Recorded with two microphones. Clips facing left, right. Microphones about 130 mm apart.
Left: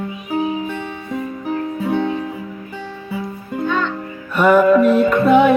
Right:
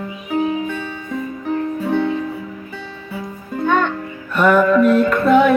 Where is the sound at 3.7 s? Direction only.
55° right (ahead or behind).